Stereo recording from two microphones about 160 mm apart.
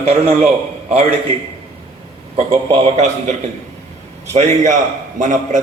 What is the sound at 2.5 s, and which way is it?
A man's voice, 40° right (ahead or behind).